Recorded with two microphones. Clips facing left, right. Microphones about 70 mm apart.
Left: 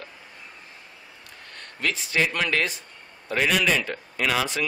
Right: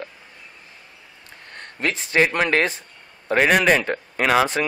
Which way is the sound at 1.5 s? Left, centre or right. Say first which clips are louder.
Right 3 dB; right.